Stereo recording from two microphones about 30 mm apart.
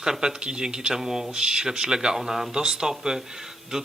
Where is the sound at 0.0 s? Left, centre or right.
Right.